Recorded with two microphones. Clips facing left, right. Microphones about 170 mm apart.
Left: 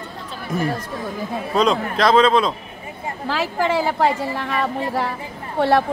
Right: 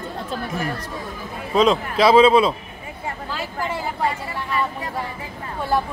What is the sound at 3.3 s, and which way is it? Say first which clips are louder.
A woman's voice: left 9 dB; 90° left.